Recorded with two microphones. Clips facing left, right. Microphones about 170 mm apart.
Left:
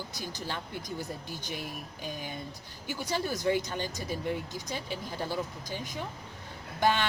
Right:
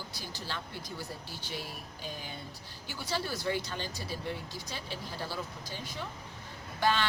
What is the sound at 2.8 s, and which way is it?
Speech, 15° left (ahead or behind).